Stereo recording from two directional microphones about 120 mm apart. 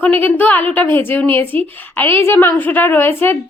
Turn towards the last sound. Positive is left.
turn(degrees=15)  # may be behind; listen again after turning